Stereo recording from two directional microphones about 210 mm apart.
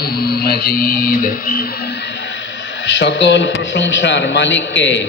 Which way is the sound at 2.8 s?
60° left (ahead or behind).